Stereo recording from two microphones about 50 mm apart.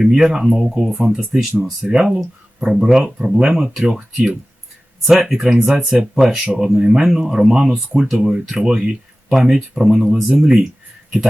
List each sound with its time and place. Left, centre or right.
0.0 s speech: centre
3.3 s speech: right
3.6 s speech: centre
5.0 s speech: centre